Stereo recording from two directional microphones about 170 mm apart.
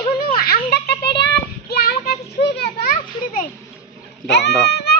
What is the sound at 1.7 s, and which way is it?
Children playing, 65° left (ahead or behind).